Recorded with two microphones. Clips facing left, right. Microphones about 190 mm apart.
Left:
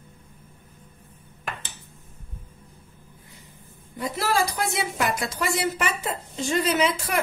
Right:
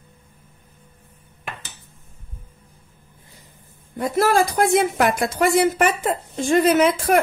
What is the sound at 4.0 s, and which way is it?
Speech, 50° right (ahead or behind).